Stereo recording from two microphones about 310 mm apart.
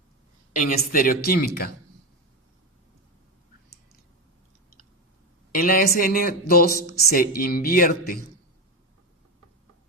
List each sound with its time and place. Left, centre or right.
0.5 s speech: left
5.5 s speech: left